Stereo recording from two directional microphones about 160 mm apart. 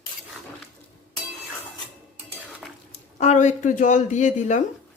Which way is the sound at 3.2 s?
45° left (ahead or behind).